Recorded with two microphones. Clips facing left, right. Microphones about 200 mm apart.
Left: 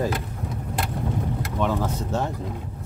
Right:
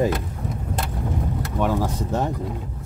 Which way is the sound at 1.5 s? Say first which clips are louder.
Right 2 dB; 10° right (ahead or behind).